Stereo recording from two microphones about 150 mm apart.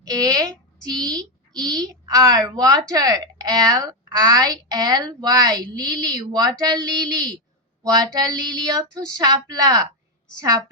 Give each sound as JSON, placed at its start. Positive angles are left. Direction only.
{"t": 0.0, "sound": "a woman's voice", "side_deg": -25}